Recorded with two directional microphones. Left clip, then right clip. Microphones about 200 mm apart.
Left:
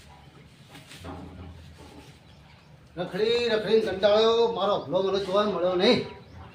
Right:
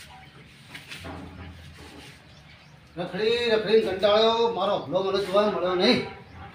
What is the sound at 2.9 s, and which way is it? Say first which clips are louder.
Speech: even; 30° left (ahead or behind).